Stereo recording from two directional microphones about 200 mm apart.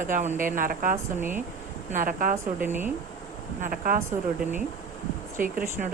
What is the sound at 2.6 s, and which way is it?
Speech, 10° right (ahead or behind).